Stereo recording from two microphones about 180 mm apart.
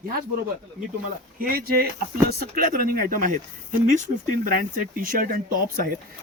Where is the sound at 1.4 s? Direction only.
55° right (ahead or behind).